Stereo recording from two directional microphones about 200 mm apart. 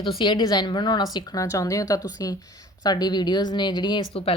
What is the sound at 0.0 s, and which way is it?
Speech, 25° left (ahead or behind).